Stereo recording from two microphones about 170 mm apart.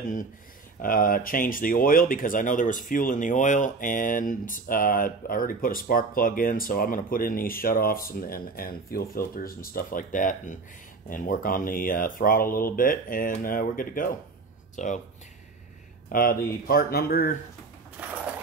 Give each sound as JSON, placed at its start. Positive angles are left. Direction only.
{"t": 0.8, "sound": "speech", "side_deg": 55}
{"t": 16.1, "sound": "speech", "side_deg": 55}